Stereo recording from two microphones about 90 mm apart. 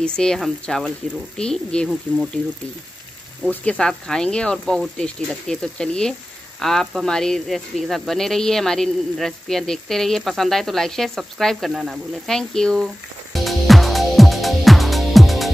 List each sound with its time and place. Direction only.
0.0 s speech: 10° left (ahead or behind)
2.4 s speech: 20° left (ahead or behind); by 15.5 s centre (ahead or behind)